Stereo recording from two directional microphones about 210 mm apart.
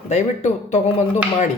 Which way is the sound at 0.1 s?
30° left (ahead or behind).